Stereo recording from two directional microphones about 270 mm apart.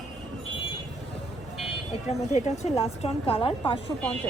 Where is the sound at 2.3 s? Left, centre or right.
Left.